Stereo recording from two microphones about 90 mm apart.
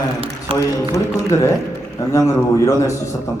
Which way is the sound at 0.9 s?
30° left (ahead or behind).